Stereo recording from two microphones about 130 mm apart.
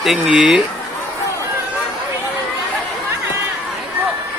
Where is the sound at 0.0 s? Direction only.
5° right (ahead or behind).